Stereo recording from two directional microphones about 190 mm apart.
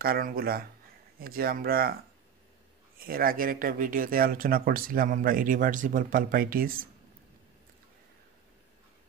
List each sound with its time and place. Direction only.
0.0 s speech: 50° right (ahead or behind)
3.0 s speech: 50° right (ahead or behind)